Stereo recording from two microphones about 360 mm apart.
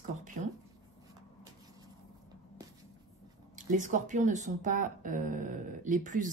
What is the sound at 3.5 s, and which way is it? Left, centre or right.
Speech, right.